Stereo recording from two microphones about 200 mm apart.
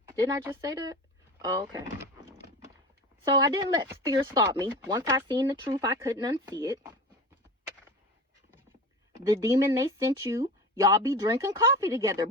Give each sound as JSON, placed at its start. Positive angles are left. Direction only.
{"t": 0.1, "sound": "speech", "side_deg": -20}
{"t": 3.3, "sound": "speech", "side_deg": -20}
{"t": 9.2, "sound": "speech", "side_deg": -15}